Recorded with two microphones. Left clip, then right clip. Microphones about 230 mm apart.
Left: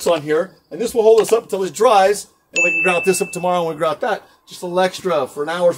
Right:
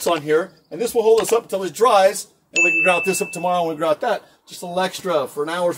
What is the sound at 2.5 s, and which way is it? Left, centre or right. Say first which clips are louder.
Speech: even; centre.